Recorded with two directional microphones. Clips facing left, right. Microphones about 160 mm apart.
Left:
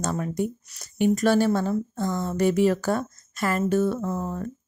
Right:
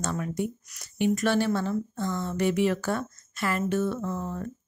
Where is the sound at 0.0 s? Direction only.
35° left (ahead or behind).